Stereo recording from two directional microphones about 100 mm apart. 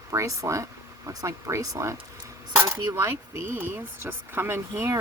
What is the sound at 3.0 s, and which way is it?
Speech, 20° right (ahead or behind).